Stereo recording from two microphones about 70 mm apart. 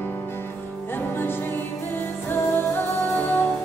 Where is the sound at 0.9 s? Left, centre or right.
Left.